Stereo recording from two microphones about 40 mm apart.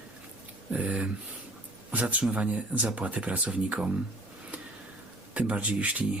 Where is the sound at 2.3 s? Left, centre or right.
Right.